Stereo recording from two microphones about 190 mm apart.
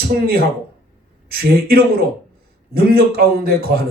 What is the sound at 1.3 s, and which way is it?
A man's voice, 55° right (ahead or behind).